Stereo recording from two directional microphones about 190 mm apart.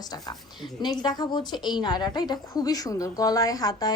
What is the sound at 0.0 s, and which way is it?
A woman's voice, 20° left (ahead or behind).